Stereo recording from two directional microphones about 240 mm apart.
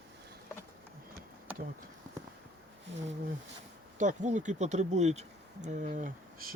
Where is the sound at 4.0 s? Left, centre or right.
Right.